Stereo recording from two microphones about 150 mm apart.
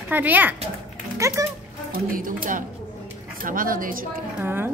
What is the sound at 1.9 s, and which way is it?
Speech, 70° right (ahead or behind).